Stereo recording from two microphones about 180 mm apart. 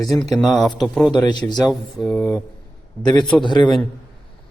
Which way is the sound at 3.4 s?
25° left (ahead or behind).